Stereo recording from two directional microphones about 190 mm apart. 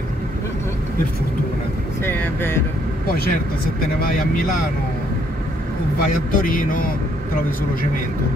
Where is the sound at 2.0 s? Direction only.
10° left (ahead or behind).